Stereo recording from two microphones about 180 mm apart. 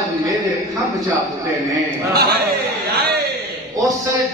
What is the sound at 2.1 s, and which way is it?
Speech, 60° right (ahead or behind).